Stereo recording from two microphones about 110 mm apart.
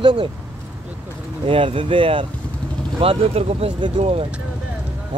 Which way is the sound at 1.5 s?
55° right (ahead or behind).